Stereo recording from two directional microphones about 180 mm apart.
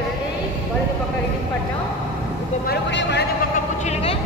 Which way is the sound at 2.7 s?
75° left (ahead or behind).